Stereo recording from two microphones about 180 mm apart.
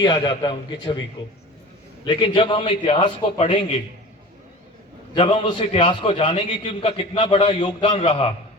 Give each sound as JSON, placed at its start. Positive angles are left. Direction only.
{"t": 0.0, "sound": "a man's voice", "side_deg": 25}
{"t": 2.0, "sound": "a man's voice", "side_deg": 30}
{"t": 5.1, "sound": "a man's voice", "side_deg": 30}